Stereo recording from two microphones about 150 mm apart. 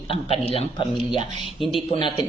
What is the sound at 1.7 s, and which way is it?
Speech, 35° left (ahead or behind).